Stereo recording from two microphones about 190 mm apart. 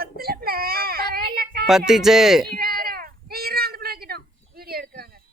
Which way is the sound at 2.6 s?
50° right (ahead or behind).